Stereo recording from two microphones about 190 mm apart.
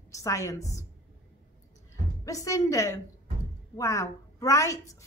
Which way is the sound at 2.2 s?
15° left (ahead or behind).